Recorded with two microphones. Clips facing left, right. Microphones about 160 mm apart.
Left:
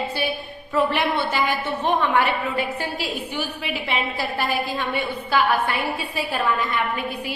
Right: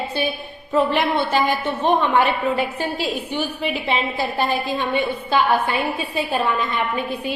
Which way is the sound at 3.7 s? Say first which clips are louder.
Right 3 dB; 25° right (ahead or behind).